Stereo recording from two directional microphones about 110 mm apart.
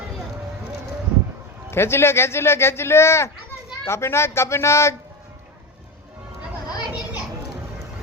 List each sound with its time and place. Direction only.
1.7 s speech: 25° left (ahead or behind)